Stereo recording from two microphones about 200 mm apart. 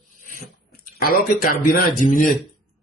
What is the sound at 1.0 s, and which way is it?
A man's voice, 45° left (ahead or behind).